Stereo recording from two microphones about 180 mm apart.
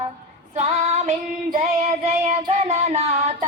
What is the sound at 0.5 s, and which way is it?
Child singing, 35° right (ahead or behind).